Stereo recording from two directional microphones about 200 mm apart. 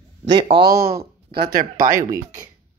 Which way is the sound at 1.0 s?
25° right (ahead or behind).